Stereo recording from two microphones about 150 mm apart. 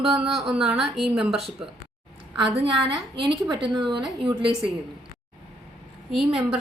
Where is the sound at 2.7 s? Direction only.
35° right (ahead or behind).